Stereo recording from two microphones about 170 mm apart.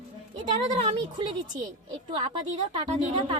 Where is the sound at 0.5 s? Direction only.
35° right (ahead or behind).